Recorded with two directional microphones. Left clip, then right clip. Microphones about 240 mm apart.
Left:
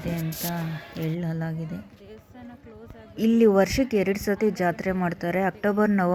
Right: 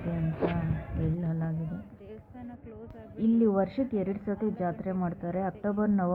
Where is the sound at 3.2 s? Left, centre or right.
Left.